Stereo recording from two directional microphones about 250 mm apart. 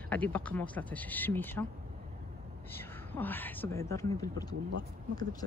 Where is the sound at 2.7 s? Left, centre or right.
Centre.